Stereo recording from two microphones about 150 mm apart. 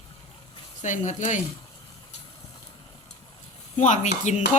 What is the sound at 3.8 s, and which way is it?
Speech, 55° left (ahead or behind).